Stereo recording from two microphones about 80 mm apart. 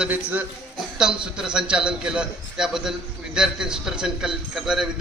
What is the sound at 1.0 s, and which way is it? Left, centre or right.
Speech, centre.